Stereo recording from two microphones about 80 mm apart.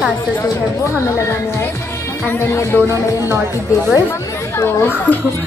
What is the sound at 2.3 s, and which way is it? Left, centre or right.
Speech, left.